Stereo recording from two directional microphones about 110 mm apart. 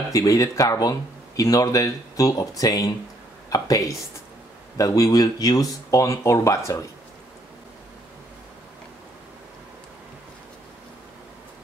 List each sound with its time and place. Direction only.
0.1 s speech: 30° left (ahead or behind)
3.4 s a sound: 30° left (ahead or behind)
4.7 s speech: 30° left (ahead or behind)